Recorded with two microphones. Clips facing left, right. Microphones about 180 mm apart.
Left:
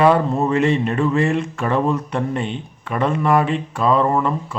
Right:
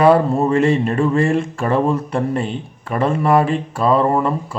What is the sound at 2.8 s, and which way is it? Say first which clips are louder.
Speech: right 2 dB; 30° right (ahead or behind).